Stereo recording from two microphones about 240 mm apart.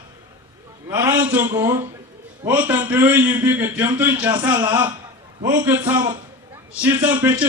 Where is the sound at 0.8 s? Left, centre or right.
Centre.